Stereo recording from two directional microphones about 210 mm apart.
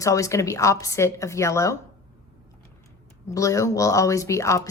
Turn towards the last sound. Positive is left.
turn(degrees=15)  # may be behind; listen again after turning